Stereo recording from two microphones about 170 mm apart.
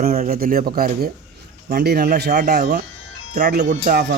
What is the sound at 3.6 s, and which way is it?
Speech, 45° right (ahead or behind).